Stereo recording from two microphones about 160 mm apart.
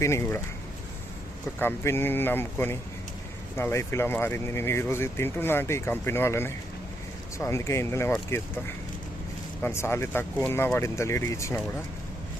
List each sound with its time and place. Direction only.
0.0 s speech: 15° left (ahead or behind)
1.5 s speech: 15° left (ahead or behind)
9.6 s speech: 15° left (ahead or behind)